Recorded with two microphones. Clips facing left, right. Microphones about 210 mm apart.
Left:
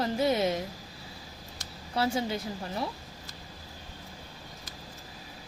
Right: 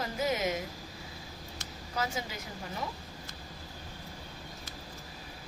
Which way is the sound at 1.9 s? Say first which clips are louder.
Left 7 dB; 30° left (ahead or behind).